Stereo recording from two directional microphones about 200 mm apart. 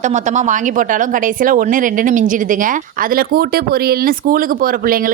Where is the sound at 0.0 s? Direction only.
35° right (ahead or behind).